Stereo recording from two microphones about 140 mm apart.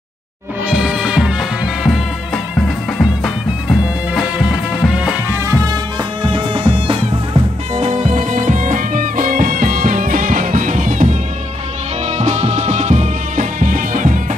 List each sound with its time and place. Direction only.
0.7 s music: 5° right (ahead or behind)
3.6 s music: centre (ahead or behind)
5.3 s music: 20° right (ahead or behind)
6.2 s music: 40° right (ahead or behind)
7.7 s music: 55° right (ahead or behind); by 11.1 s 70° right (ahead or behind)
12.1 s music: 55° right (ahead or behind); by 14.2 s 70° right (ahead or behind)